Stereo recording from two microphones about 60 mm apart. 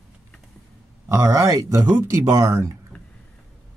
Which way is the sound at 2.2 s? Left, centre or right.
Right.